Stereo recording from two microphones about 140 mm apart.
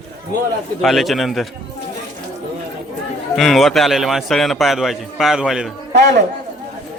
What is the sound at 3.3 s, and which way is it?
A man's voice, centre (ahead or behind).